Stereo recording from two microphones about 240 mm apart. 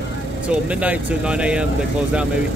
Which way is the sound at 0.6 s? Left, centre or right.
Centre.